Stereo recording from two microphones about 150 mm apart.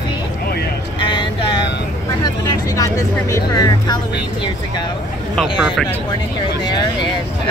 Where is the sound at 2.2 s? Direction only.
20° left (ahead or behind).